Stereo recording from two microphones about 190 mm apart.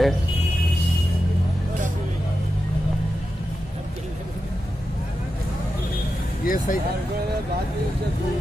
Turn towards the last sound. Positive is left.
turn(degrees=45)  # may be behind; listen again after turning